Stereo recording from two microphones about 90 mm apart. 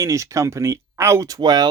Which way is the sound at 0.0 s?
35° right (ahead or behind).